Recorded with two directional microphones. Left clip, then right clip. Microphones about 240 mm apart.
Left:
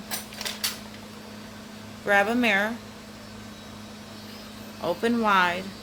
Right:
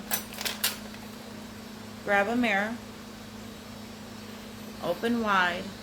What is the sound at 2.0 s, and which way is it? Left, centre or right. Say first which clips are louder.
Speech: left 4 dB; left.